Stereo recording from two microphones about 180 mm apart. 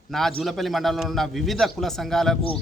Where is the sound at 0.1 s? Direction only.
Centre (ahead or behind).